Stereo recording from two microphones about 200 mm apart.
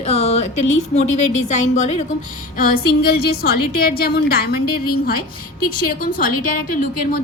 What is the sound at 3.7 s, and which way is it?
A woman's voice, 50° left (ahead or behind).